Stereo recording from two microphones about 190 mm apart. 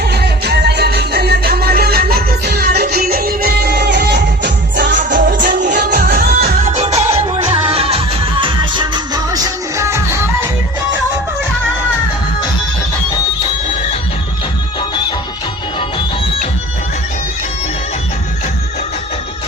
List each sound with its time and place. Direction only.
0.0 s music: 60° right (ahead or behind)
4.9 s music: 45° right (ahead or behind)
6.7 s music: 35° right (ahead or behind); by 10.5 s 15° right (ahead or behind)